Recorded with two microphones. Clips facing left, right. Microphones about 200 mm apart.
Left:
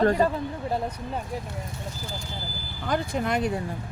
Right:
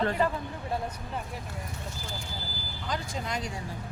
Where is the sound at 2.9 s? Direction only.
60° left (ahead or behind).